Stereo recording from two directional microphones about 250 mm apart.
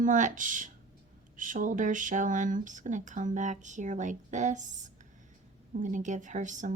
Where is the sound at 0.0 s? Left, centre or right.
Right.